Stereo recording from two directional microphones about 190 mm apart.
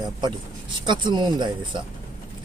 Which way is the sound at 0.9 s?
25° right (ahead or behind).